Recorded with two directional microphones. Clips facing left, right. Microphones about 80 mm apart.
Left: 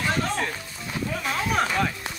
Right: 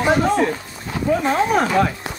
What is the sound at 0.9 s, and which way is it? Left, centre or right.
Speech, right.